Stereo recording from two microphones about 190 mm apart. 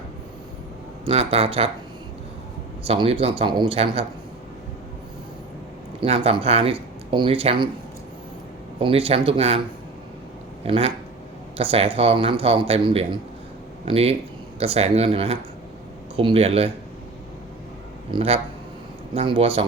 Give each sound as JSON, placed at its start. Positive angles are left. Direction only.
{"t": 1.0, "sound": "speech", "side_deg": -30}
{"t": 2.8, "sound": "speech", "side_deg": -30}
{"t": 6.0, "sound": "speech", "side_deg": -30}
{"t": 8.8, "sound": "speech", "side_deg": -30}
{"t": 10.7, "sound": "speech", "side_deg": -30}
{"t": 18.1, "sound": "speech", "side_deg": -30}